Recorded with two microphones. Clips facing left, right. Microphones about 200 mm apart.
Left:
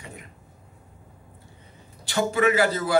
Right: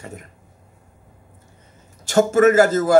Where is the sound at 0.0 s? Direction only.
45° right (ahead or behind).